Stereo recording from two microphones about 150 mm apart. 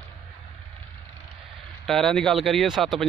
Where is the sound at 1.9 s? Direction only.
Centre (ahead or behind).